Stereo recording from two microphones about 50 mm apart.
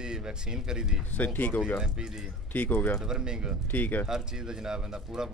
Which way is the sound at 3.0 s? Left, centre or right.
Centre.